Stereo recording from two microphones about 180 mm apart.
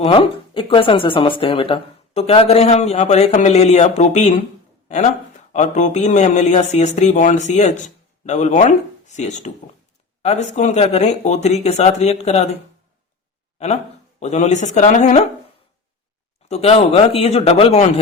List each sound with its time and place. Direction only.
0.0 s speech: 30° left (ahead or behind)
14.2 s speech: 40° left (ahead or behind)
16.5 s speech: 35° left (ahead or behind)